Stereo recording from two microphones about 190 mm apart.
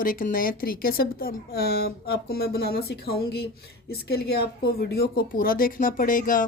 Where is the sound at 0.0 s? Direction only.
45° left (ahead or behind).